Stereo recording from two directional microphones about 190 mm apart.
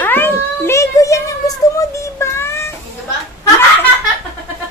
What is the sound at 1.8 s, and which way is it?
Music, 15° left (ahead or behind).